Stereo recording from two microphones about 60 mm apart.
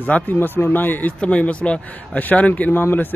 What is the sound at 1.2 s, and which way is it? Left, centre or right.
Speech, centre.